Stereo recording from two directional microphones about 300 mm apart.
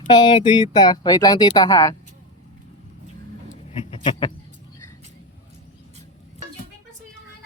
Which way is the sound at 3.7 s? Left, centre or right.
Centre.